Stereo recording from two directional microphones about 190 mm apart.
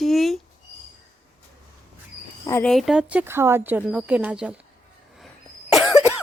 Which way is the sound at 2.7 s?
Centre (ahead or behind).